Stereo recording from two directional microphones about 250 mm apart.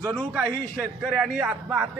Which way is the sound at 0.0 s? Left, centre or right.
Centre.